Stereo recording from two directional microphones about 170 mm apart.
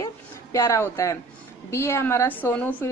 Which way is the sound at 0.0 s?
15° left (ahead or behind).